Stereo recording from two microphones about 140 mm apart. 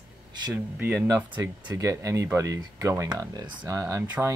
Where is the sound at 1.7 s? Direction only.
20° right (ahead or behind).